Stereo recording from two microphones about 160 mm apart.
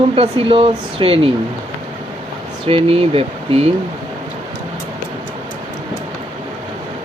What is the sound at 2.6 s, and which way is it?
Speech, 35° right (ahead or behind).